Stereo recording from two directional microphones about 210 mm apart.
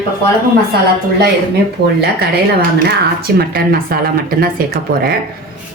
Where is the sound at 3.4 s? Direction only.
45° right (ahead or behind).